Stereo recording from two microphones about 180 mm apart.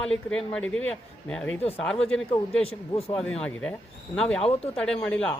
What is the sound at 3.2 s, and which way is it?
Speech, 5° left (ahead or behind).